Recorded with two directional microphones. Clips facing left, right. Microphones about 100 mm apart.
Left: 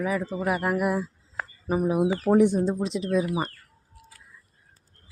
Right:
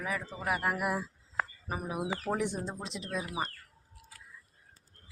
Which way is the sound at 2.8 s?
Centre (ahead or behind).